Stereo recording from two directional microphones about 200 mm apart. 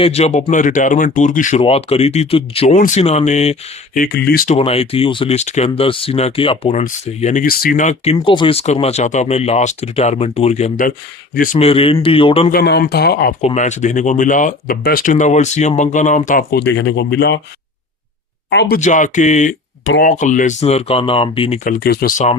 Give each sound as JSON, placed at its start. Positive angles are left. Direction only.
{"t": 0.0, "sound": "speech", "side_deg": 30}
{"t": 4.0, "sound": "speech", "side_deg": 50}
{"t": 4.4, "sound": "speech", "side_deg": 30}
{"t": 11.5, "sound": "speech", "side_deg": 30}
{"t": 12.5, "sound": "speech", "side_deg": 50}
{"t": 13.4, "sound": "speech", "side_deg": 35}
{"t": 18.5, "sound": "speech", "side_deg": 60}
{"t": 18.8, "sound": "speech", "side_deg": 40}
{"t": 21.6, "sound": "speech", "side_deg": 45}